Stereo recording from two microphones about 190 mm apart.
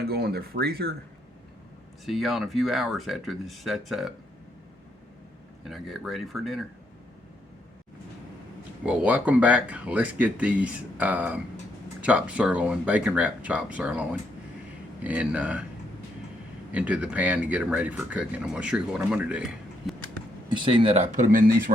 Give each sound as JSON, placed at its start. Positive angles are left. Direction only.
{"t": 0.1, "sound": "speech", "side_deg": -55}
{"t": 2.0, "sound": "speech", "side_deg": 0}
{"t": 5.6, "sound": "speech", "side_deg": 0}
{"t": 8.8, "sound": "speech", "side_deg": -5}
{"t": 16.7, "sound": "speech", "side_deg": -5}
{"t": 20.6, "sound": "speech", "side_deg": -25}